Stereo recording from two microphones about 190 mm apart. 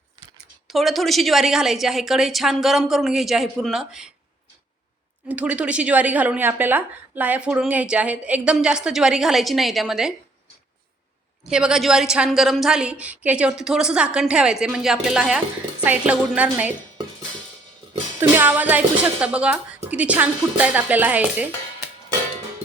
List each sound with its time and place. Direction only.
0.2 s a sound: 25° right (ahead or behind)
0.7 s a woman's voice: centre (ahead or behind)
5.3 s a woman's voice: 5° right (ahead or behind)
11.4 s a woman's voice: 5° right (ahead or behind)
18.2 s a woman's voice: 10° right (ahead or behind)